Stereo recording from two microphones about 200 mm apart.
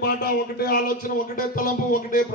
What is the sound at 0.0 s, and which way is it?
A man's voice, 50° left (ahead or behind).